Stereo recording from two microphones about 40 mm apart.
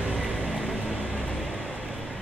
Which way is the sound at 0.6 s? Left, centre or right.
Centre.